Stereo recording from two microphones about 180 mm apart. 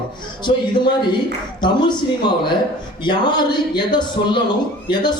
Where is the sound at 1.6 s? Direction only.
25° left (ahead or behind).